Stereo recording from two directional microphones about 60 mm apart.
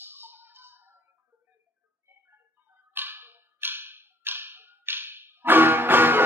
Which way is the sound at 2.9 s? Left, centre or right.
Right.